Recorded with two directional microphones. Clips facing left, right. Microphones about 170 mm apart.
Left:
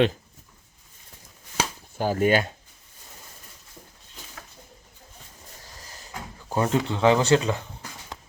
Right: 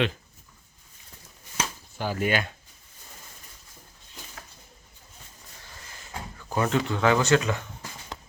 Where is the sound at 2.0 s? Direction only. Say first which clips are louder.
Left 5 dB; 40° left (ahead or behind).